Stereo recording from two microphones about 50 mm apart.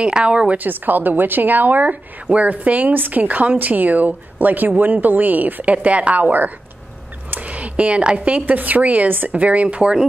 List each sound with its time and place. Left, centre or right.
0.0 s speech: right
0.6 s a woman's voice: right
7.2 s a sound: right
8.5 s a woman's voice: right